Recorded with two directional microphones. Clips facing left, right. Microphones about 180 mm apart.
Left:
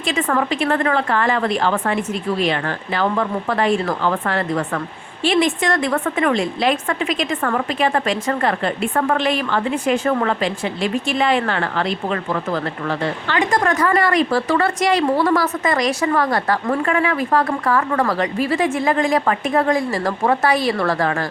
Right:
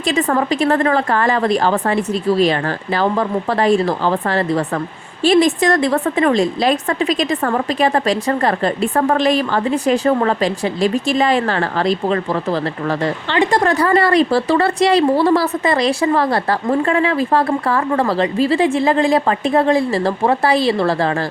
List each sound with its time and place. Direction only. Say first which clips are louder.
0.0 s a woman's voice: right 3 dB; 40° right (ahead or behind)